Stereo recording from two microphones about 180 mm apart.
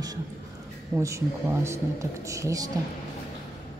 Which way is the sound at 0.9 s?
15° right (ahead or behind).